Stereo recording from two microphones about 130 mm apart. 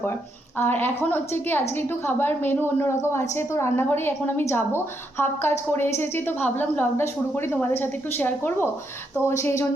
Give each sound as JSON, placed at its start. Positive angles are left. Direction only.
{"t": 0.6, "sound": "a woman's voice", "side_deg": 15}